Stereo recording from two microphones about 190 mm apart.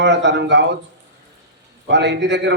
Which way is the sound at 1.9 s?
65° right (ahead or behind).